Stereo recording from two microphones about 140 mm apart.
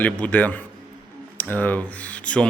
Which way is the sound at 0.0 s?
10° left (ahead or behind).